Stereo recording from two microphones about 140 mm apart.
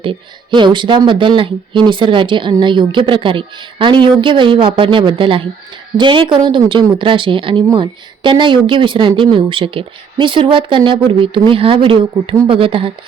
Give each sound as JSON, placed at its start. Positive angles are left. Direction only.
{"t": 0.0, "sound": "speech", "side_deg": -35}